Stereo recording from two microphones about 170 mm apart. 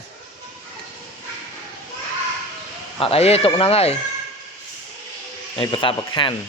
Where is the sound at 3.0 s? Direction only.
35° left (ahead or behind).